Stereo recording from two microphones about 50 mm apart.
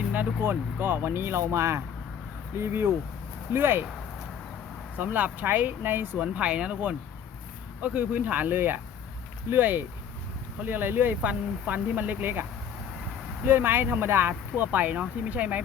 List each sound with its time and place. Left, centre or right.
0.4 s speech: right
2.6 s speech: right
4.9 s speech: right
6.2 s speech: right